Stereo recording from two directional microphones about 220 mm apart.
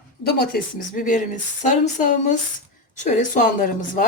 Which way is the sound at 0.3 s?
45° left (ahead or behind).